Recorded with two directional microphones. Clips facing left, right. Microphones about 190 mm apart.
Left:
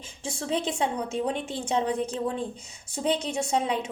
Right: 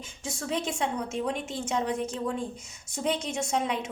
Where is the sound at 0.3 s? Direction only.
30° left (ahead or behind).